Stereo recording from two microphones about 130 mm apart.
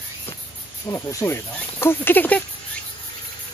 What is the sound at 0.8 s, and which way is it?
Speech, 20° left (ahead or behind).